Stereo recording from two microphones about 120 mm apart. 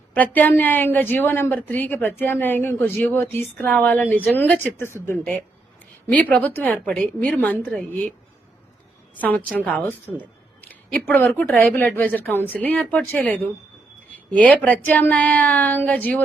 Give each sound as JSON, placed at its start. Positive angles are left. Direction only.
{"t": 0.1, "sound": "a woman's voice", "side_deg": 15}
{"t": 9.3, "sound": "a woman's voice", "side_deg": 15}
{"t": 14.5, "sound": "a woman's voice", "side_deg": 10}